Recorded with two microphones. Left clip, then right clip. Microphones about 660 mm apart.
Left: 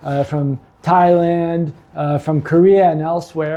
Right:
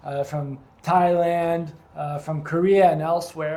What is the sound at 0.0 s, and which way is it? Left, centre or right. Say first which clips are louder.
Speech: left 8 dB; left.